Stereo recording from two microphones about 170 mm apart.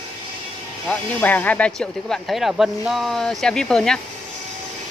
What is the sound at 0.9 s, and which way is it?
Speech, 10° left (ahead or behind).